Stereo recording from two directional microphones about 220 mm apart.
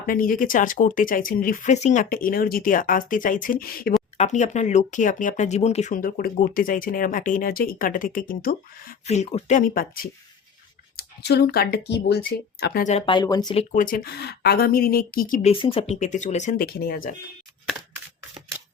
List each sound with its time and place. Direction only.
0.1 s speech: 40° left (ahead or behind)
9.0 s speech: 30° left (ahead or behind); by 12.8 s 45° left (ahead or behind)
12.8 s speech: 30° left (ahead or behind)
13.7 s speech: 40° left (ahead or behind)